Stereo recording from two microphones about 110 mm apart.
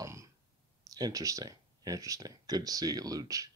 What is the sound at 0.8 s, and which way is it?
Speech, 35° right (ahead or behind).